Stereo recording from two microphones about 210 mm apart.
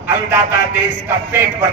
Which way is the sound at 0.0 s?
10° right (ahead or behind).